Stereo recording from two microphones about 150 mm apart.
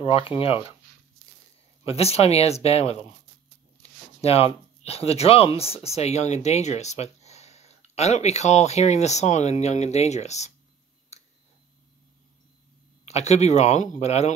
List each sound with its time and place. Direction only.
0.0 s speech: 40° left (ahead or behind)
1.9 s speech: 45° left (ahead or behind)
3.8 s a sound: 40° left (ahead or behind)
4.8 s speech: 40° left (ahead or behind)
11.1 s a sound: 45° left (ahead or behind)
13.0 s speech: 50° left (ahead or behind)